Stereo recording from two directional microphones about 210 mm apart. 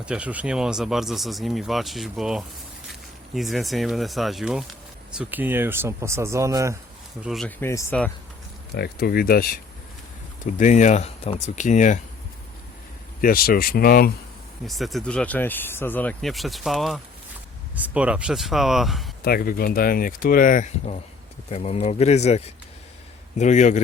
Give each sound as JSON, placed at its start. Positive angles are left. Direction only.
{"t": 0.0, "sound": "speech", "side_deg": -5}
{"t": 7.2, "sound": "speech", "side_deg": 0}
{"t": 8.7, "sound": "speech", "side_deg": 50}
{"t": 13.2, "sound": "speech", "side_deg": 45}
{"t": 14.7, "sound": "speech", "side_deg": 0}
{"t": 19.2, "sound": "speech", "side_deg": 45}